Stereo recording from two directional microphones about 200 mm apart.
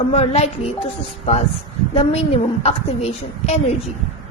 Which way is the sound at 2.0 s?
30° left (ahead or behind).